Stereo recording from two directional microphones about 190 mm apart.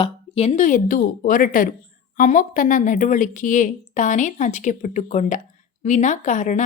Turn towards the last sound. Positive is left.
turn(degrees=40)  # may be behind; listen again after turning